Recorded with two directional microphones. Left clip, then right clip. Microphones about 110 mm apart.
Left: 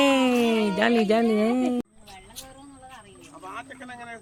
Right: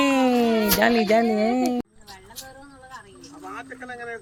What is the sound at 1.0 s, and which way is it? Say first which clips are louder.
Speech: right 2 dB; 20° left (ahead or behind).